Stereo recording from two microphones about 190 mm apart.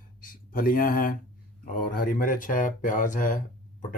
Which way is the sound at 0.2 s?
45° left (ahead or behind).